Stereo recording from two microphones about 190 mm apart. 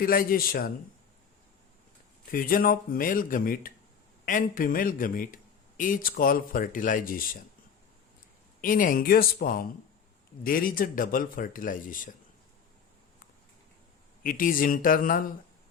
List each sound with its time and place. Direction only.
0.0 s speech: 50° left (ahead or behind)
2.2 s speech: 50° left (ahead or behind)
8.6 s speech: 45° left (ahead or behind)
14.3 s speech: 45° left (ahead or behind)